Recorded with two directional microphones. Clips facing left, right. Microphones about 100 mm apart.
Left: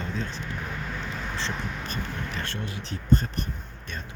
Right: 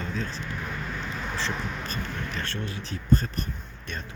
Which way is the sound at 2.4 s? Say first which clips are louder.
Even; 20° left (ahead or behind).